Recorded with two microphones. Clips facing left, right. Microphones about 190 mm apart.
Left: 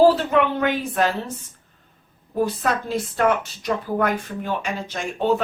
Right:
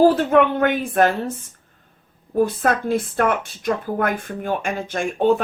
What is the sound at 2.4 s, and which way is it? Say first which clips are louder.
Speech: right 3 dB; 50° right (ahead or behind).